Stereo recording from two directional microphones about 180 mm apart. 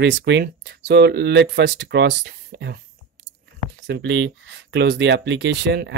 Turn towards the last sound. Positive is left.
turn(degrees=-70)  # may be behind; listen again after turning